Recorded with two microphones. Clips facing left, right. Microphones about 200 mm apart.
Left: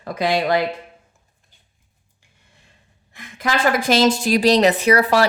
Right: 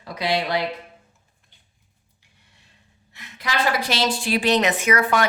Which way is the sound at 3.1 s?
50° left (ahead or behind).